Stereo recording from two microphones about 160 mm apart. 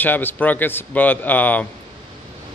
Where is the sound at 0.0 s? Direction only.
10° left (ahead or behind).